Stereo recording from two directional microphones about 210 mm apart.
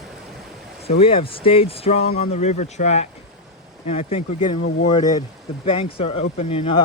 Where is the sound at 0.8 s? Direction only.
25° left (ahead or behind).